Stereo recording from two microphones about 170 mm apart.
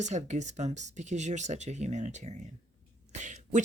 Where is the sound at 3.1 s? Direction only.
45° right (ahead or behind).